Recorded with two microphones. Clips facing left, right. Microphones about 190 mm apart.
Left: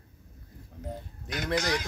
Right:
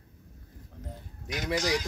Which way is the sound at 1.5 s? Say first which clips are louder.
Even; 60° left (ahead or behind).